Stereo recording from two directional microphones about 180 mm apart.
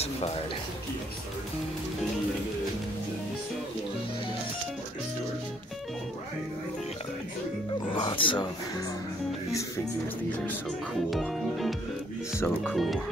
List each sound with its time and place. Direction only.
0.0 s music: 35° left (ahead or behind)
7.9 s music: 25° left (ahead or behind)
11.1 s speech: centre (ahead or behind)